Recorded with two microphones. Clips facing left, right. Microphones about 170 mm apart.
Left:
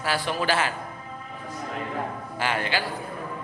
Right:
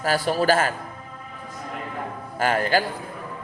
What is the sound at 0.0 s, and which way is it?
Speech, 40° right (ahead or behind).